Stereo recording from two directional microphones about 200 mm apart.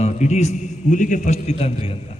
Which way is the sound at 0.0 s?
35° left (ahead or behind).